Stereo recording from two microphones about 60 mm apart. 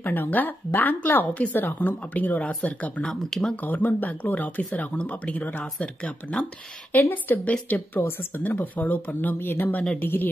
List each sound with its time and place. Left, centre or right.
0.0 s speech: left
3.3 s speech: centre
3.6 s speech: left
5.8 s speech: centre
7.0 s speech: left